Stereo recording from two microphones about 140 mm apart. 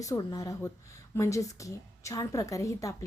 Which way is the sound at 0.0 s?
25° left (ahead or behind).